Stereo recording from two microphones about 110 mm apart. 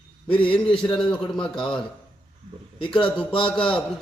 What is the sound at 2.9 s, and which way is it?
Speech, 10° left (ahead or behind).